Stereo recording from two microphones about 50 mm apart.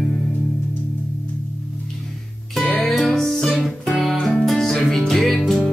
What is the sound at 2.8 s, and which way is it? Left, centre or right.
Music, centre.